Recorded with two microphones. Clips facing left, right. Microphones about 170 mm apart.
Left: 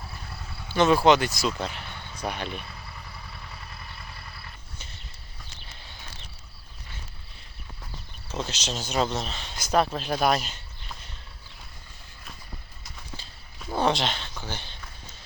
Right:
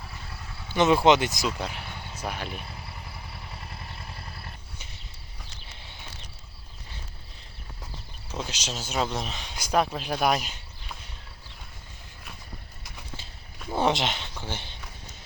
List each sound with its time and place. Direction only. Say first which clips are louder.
0.7 s speech: even; 20° right (ahead or behind)
8.4 s a man's voice: left 2 dB; 10° right (ahead or behind)
13.7 s speech: even; 20° right (ahead or behind)